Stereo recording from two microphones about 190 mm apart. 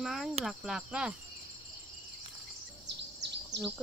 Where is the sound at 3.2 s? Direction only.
65° right (ahead or behind).